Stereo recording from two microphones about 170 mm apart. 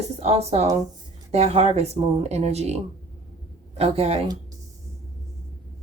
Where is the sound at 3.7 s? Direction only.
35° right (ahead or behind).